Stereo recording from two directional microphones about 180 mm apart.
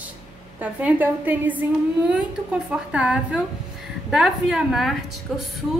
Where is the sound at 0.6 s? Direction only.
10° right (ahead or behind).